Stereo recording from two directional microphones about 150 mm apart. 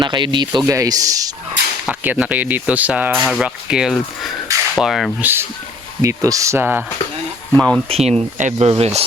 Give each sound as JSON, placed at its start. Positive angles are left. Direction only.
{"t": 0.0, "sound": "speech", "side_deg": -30}
{"t": 1.9, "sound": "speech", "side_deg": -10}
{"t": 5.2, "sound": "speech", "side_deg": -15}
{"t": 7.5, "sound": "speech", "side_deg": 5}
{"t": 7.9, "sound": "speech", "side_deg": -45}